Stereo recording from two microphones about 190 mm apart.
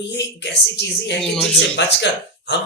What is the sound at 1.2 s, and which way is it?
Speech, centre (ahead or behind).